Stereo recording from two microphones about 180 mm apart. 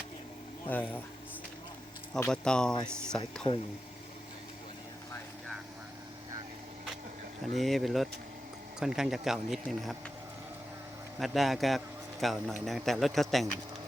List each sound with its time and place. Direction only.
0.7 s speech: 10° left (ahead or behind)
2.3 s speech: 5° left (ahead or behind)
3.4 s speech: 25° left (ahead or behind)
7.5 s speech: centre (ahead or behind)
11.2 s speech: centre (ahead or behind)